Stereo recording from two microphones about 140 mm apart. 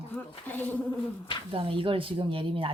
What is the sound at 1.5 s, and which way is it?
Speech, 40° right (ahead or behind).